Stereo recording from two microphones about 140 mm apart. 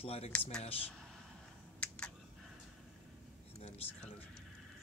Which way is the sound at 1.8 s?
5° left (ahead or behind).